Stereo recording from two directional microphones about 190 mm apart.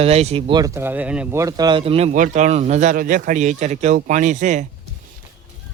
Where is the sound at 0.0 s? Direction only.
35° right (ahead or behind); by 1.4 s 5° right (ahead or behind).